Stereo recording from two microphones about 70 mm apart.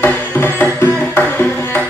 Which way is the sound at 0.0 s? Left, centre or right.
Left.